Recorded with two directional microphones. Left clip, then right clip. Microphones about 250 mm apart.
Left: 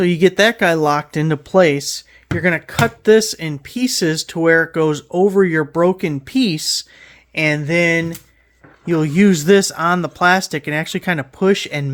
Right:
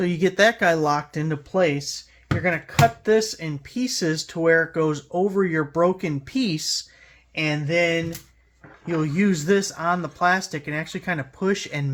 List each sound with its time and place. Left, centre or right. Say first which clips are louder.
0.0 s speech: left 5 dB; left
7.3 s a sound: left 6 dB; left
8.9 s speech: left 8 dB; left